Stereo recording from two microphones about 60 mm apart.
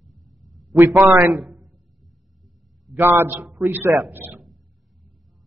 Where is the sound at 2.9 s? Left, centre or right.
Right.